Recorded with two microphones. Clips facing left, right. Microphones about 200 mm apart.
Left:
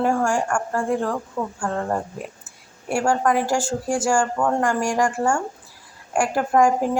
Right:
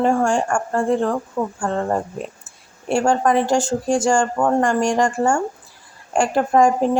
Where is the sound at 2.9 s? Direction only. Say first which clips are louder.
Right 3 dB; 25° right (ahead or behind).